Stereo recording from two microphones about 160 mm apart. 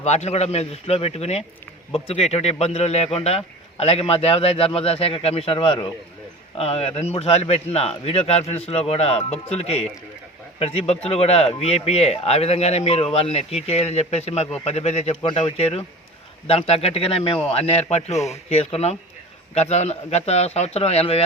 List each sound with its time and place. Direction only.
0.0 s speech: 45° left (ahead or behind)
16.5 s speech: 40° left (ahead or behind)